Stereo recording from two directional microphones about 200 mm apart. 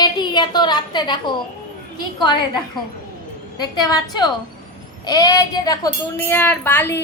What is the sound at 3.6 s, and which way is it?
A woman's voice, 20° left (ahead or behind).